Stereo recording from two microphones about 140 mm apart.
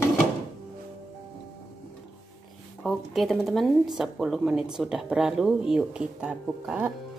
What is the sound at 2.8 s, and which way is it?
Speech, centre (ahead or behind).